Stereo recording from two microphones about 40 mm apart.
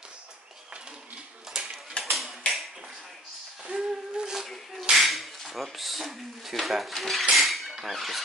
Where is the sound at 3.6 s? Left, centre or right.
Centre.